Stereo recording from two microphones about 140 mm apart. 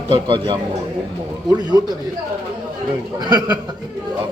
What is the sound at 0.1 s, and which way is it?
Speech, 35° right (ahead or behind).